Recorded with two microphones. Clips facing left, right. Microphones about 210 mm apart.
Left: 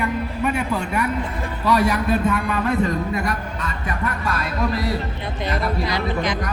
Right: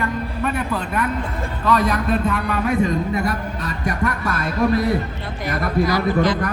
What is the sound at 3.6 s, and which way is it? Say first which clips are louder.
A man's voice: right 4 dB; 40° right (ahead or behind).